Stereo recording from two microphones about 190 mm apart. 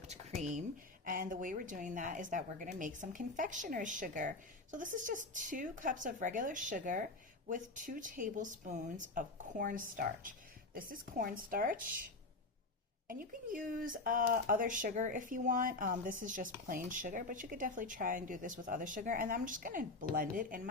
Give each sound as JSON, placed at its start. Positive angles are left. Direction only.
{"t": 1.0, "sound": "speech", "side_deg": -45}
{"t": 13.1, "sound": "speech", "side_deg": -45}